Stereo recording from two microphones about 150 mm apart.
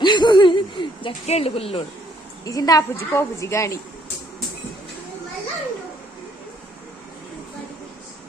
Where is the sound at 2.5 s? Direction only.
25° left (ahead or behind).